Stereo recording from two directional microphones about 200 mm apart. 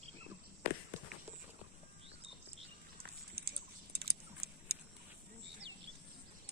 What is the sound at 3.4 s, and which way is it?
Vehicle, 50° right (ahead or behind).